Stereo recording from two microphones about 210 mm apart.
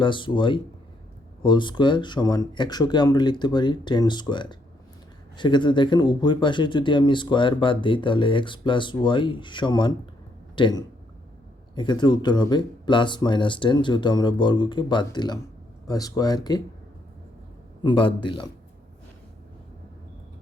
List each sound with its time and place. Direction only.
0.0 s speech: 25° left (ahead or behind)
17.8 s speech: 20° left (ahead or behind)